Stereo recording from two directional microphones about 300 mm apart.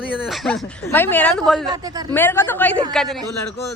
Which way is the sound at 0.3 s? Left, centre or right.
Centre.